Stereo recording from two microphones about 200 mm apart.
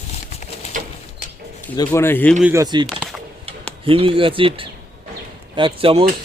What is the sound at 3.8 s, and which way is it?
Speech, 25° right (ahead or behind).